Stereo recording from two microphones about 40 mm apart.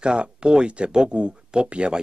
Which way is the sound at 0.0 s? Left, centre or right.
Right.